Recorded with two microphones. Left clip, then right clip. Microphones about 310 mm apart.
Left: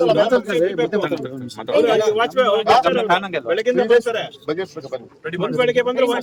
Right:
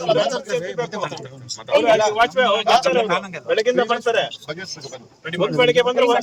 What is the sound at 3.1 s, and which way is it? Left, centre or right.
Speech, left.